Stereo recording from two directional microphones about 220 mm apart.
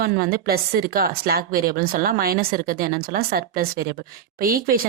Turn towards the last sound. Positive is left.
turn(degrees=-40)  # may be behind; listen again after turning